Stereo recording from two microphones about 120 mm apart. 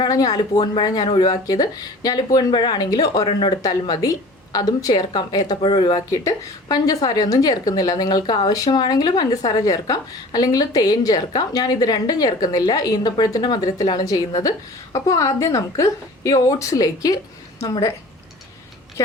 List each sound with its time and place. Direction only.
0.0 s a woman's voice: 35° left (ahead or behind)